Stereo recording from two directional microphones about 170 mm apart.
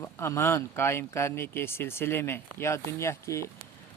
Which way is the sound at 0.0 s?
15° left (ahead or behind).